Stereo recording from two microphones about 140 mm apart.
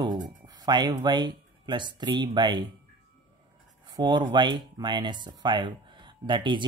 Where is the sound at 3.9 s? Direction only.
30° right (ahead or behind).